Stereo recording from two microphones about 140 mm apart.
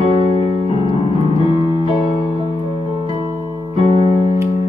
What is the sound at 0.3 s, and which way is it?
Piano, 45° left (ahead or behind).